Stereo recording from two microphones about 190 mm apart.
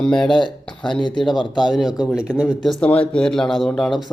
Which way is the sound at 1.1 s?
25° left (ahead or behind).